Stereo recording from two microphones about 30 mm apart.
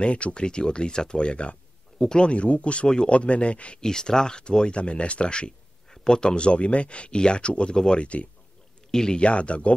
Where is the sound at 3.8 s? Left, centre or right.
Left.